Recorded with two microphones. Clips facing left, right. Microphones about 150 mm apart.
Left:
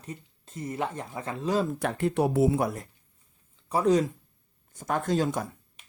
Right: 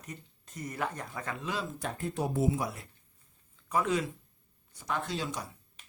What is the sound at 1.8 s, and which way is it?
Speech, 75° left (ahead or behind).